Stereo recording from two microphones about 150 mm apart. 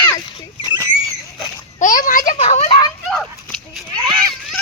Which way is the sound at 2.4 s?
45° left (ahead or behind).